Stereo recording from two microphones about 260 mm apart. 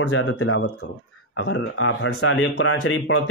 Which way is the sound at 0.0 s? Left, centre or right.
Left.